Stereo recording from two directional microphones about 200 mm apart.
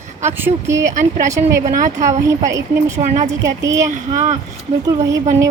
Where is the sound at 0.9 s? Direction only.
40° right (ahead or behind).